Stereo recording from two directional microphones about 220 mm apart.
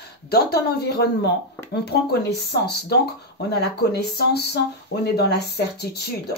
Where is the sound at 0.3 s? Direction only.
45° left (ahead or behind).